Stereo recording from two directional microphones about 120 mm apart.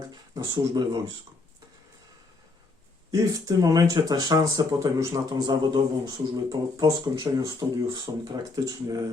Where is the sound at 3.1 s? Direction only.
30° right (ahead or behind).